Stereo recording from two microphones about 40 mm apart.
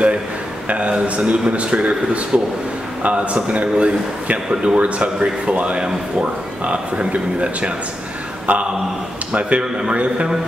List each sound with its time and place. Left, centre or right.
0.7 s a man's voice: right
8.5 s speech: right
9.3 s speech: right